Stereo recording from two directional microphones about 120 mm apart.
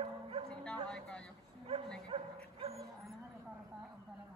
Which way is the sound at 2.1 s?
55° right (ahead or behind).